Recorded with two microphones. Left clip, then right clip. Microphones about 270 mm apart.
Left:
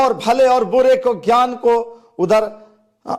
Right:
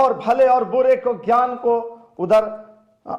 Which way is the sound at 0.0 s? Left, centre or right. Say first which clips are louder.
Left 2 dB; left.